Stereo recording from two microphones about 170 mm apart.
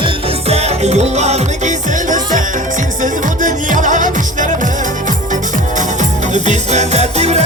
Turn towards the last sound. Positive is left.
turn(degrees=-40)  # may be behind; listen again after turning